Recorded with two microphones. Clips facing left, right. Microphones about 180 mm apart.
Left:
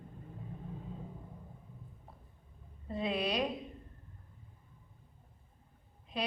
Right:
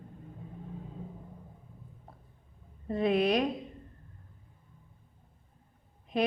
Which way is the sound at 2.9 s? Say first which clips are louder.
Right 8 dB; 55° right (ahead or behind).